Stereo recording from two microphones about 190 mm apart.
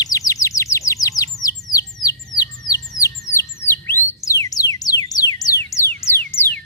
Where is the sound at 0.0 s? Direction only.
20° left (ahead or behind).